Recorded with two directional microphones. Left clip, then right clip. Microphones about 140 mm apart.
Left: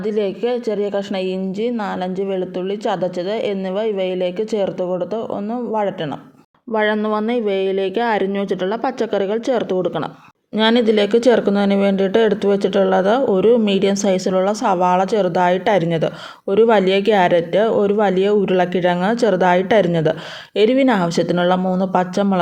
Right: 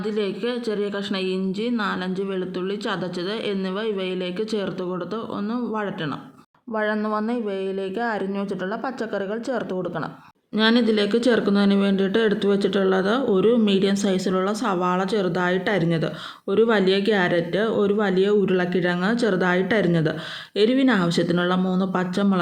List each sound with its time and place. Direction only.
0.0 s speech: 35° left (ahead or behind)